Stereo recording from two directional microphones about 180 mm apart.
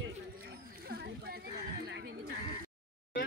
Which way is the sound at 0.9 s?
65° right (ahead or behind).